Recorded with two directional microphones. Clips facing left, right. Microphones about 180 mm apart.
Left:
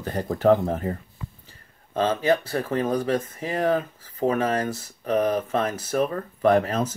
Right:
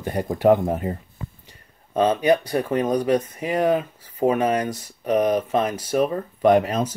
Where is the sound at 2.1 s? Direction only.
20° right (ahead or behind).